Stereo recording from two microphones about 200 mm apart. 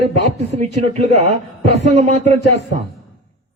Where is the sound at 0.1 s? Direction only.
35° right (ahead or behind).